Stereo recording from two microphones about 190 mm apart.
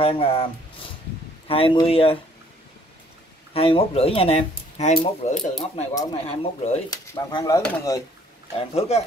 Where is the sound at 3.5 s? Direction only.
30° left (ahead or behind).